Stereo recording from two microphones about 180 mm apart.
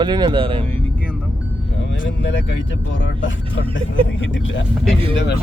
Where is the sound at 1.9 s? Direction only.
90° left.